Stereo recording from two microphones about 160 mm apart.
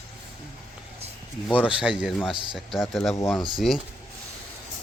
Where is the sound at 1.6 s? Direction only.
5° right (ahead or behind).